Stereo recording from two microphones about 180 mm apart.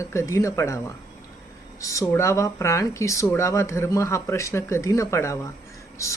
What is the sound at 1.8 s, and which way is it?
Speech, 15° left (ahead or behind).